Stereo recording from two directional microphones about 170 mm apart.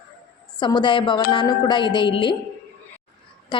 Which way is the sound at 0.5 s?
25° left (ahead or behind).